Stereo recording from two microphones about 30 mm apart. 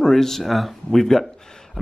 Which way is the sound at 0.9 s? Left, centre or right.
Centre.